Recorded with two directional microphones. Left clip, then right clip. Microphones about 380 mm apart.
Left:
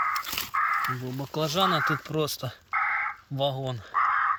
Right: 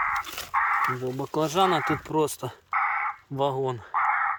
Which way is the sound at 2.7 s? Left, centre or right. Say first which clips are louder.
Right 1 dB; right.